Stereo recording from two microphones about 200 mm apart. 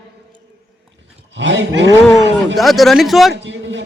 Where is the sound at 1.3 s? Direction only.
60° right (ahead or behind).